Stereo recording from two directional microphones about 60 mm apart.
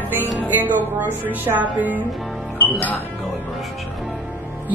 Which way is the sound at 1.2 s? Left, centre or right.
Right.